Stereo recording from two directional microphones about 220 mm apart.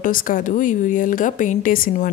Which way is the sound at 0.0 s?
40° left (ahead or behind).